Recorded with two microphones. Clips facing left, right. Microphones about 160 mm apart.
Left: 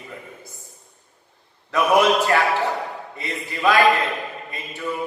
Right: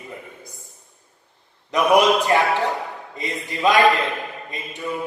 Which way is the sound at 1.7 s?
20° right (ahead or behind).